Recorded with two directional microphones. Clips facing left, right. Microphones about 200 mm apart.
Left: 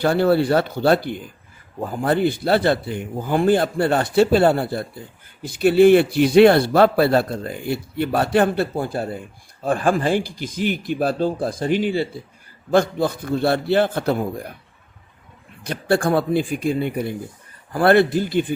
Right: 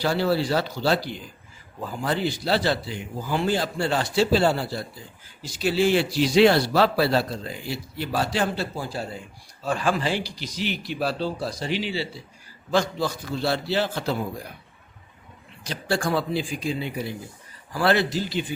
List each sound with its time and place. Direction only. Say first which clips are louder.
0.0 s a man's voice: left 6 dB; 55° left (ahead or behind)
15.6 s a man's voice: left 7 dB; 55° left (ahead or behind)